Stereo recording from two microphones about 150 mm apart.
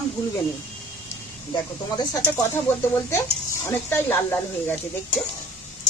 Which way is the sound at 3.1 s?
15° left (ahead or behind).